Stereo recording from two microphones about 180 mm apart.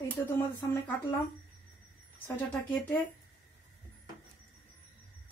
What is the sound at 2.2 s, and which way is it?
Speech, 10° left (ahead or behind).